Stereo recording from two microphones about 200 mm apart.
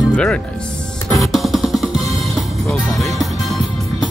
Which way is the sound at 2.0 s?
Centre (ahead or behind).